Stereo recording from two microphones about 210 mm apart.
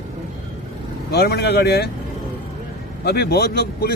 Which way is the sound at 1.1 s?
50° left (ahead or behind).